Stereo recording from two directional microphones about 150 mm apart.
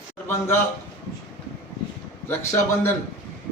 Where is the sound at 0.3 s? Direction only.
15° left (ahead or behind).